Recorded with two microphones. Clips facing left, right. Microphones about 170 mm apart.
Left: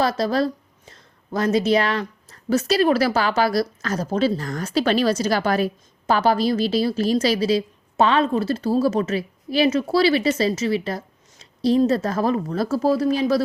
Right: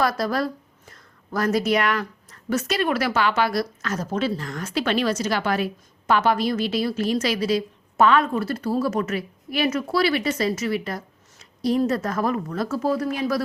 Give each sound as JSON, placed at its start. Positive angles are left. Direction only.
{"t": 0.0, "sound": "a woman's voice", "side_deg": 25}